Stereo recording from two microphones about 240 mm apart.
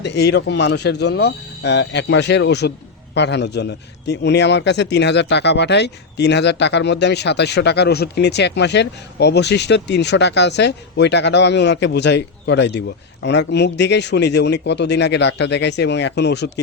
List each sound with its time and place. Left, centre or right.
0.0 s speech: left